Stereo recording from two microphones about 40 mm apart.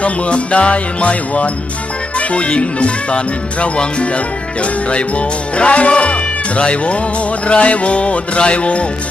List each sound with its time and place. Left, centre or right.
0.0 s speech: left